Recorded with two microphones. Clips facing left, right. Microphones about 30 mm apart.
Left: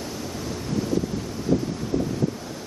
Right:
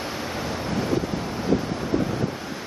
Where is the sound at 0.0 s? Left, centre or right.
Right.